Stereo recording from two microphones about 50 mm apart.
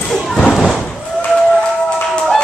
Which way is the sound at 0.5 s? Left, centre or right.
Centre.